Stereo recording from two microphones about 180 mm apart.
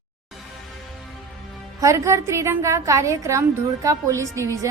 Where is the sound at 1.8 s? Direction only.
15° right (ahead or behind).